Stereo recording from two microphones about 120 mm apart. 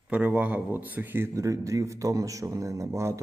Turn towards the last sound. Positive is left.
turn(degrees=-25)  # may be behind; listen again after turning